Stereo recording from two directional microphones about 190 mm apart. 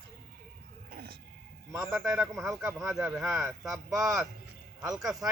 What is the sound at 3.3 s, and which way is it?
Speech, 15° right (ahead or behind).